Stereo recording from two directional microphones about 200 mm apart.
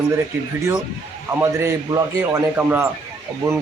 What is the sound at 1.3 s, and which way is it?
A man's voice, 15° right (ahead or behind).